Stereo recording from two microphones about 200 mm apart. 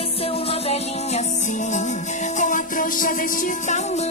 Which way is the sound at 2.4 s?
40° left (ahead or behind).